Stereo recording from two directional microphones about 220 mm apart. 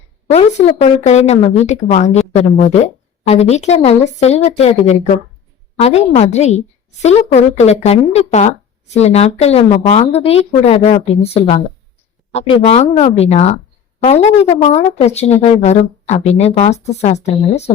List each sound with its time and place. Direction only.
0.3 s a woman's voice: 30° left (ahead or behind)